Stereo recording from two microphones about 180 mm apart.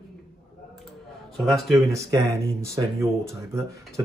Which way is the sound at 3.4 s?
15° right (ahead or behind).